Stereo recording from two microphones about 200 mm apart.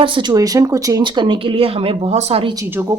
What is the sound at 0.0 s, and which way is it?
A woman's voice, 25° right (ahead or behind).